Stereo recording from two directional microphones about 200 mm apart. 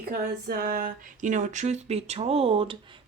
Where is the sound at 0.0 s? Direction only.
50° right (ahead or behind).